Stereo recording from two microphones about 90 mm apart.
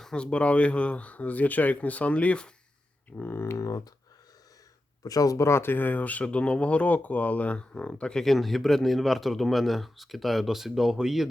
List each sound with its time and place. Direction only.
0.0 s speech: 10° left (ahead or behind); by 3.8 s 40° left (ahead or behind)
5.0 s speech: 40° left (ahead or behind); by 11.3 s 5° right (ahead or behind)